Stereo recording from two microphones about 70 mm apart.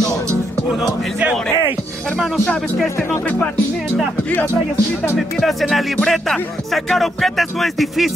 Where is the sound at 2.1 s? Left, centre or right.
Centre.